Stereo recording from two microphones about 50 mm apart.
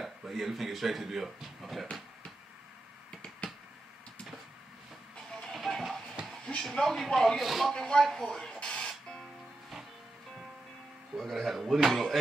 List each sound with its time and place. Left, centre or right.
0.0 s speech: centre
3.1 s finger snapping: left
5.5 s train: centre
6.4 s speech: centre
7.7 s speech: centre
8.6 s music: centre
11.1 s speech: centre